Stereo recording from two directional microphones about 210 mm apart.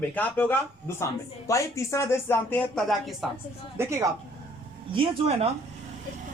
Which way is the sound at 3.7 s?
15° right (ahead or behind).